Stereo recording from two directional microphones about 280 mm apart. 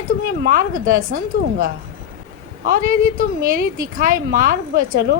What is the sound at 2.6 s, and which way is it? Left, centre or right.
A woman's voice, right.